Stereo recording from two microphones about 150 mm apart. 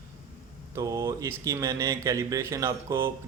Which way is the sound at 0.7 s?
20° right (ahead or behind).